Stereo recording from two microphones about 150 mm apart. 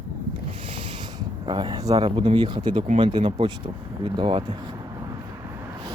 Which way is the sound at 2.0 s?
35° right (ahead or behind).